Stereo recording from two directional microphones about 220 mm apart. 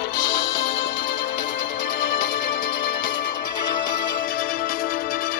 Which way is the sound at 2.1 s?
40° left (ahead or behind).